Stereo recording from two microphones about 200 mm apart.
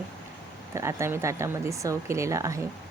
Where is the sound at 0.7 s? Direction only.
15° right (ahead or behind).